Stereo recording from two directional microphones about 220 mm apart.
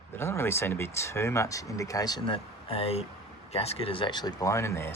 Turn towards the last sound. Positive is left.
turn(degrees=10)  # may be behind; listen again after turning